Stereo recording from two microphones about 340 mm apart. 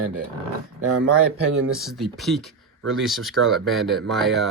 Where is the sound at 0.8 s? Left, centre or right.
Right.